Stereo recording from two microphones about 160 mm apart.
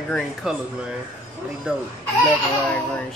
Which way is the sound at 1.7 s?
10° right (ahead or behind).